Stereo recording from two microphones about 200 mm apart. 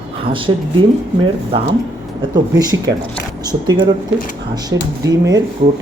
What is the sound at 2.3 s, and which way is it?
Speech, 20° right (ahead or behind).